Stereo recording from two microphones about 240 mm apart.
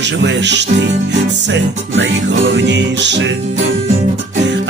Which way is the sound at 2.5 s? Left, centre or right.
Right.